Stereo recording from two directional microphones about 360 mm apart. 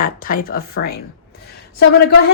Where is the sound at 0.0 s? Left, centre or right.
Left.